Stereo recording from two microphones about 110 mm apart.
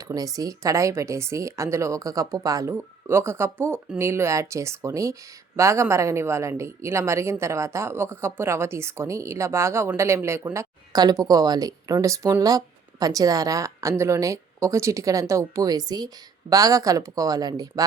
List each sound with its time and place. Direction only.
0.0 s speech: 35° right (ahead or behind)
2.7 s speech: 20° right (ahead or behind)
10.9 s speech: 35° right (ahead or behind)